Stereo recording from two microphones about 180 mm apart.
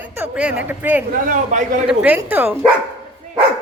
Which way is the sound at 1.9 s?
10° right (ahead or behind).